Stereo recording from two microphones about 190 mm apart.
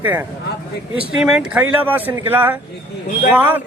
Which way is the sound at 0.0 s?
10° right (ahead or behind).